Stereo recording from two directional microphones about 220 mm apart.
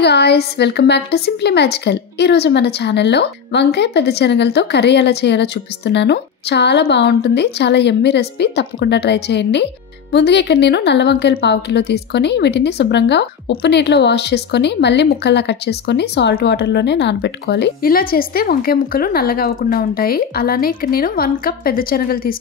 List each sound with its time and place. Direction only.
0.0 s a woman's voice: 50° left (ahead or behind)